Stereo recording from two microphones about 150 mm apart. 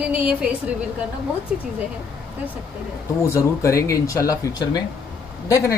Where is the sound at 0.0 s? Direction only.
5° right (ahead or behind).